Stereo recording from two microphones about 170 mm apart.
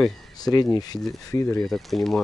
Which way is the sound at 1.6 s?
Centre (ahead or behind).